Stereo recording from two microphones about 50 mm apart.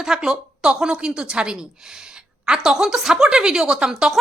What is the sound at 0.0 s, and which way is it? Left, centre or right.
Speech, centre.